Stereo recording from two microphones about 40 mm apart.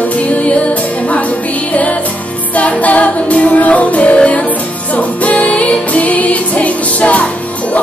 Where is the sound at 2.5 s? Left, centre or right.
Left.